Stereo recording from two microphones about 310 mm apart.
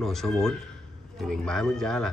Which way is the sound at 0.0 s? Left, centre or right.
Centre.